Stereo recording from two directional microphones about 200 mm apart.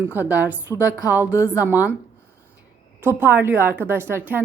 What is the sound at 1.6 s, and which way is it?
Speech, 10° right (ahead or behind).